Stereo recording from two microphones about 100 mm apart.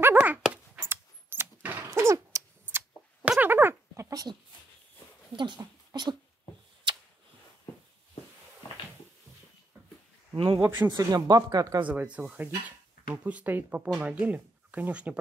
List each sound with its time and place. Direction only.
0.0 s dog: 15° right (ahead or behind)
0.7 s a sound: 25° right (ahead or behind)
1.9 s a sound: 30° right (ahead or behind)
3.3 s dog: 20° right (ahead or behind); by 4.4 s 40° right (ahead or behind)
5.3 s speech: 50° right (ahead or behind)
10.3 s a man's voice: 65° right (ahead or behind)
11.0 s speech: 40° right (ahead or behind)
11.9 s speech: 15° right (ahead or behind)